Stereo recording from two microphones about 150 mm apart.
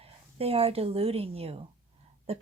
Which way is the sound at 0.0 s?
40° right (ahead or behind).